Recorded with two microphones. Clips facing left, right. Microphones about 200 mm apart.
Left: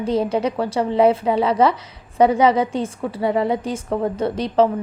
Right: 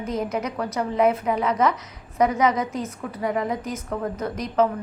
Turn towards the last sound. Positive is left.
turn(degrees=30)  # may be behind; listen again after turning